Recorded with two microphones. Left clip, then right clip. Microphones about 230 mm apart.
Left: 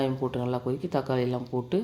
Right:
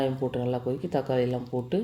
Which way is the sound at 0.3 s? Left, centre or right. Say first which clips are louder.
Right 1 dB; centre.